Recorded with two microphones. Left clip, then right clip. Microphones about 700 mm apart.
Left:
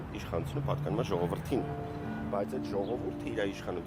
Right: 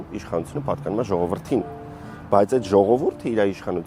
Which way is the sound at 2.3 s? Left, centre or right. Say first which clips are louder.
Right 18 dB; right.